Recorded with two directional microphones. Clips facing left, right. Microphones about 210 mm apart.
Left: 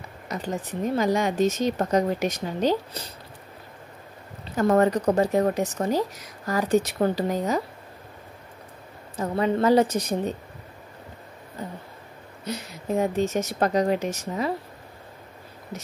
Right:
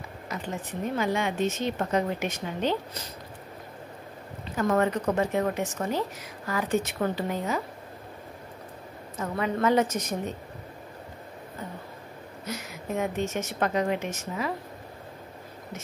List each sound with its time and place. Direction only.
0.3 s a woman's voice: 35° left (ahead or behind)
4.6 s a woman's voice: 40° left (ahead or behind)
9.1 s a woman's voice: 30° left (ahead or behind)
12.4 s a woman's voice: 35° left (ahead or behind)